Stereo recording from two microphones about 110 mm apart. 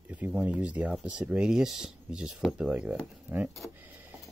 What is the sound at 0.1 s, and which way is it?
Speech, 15° right (ahead or behind).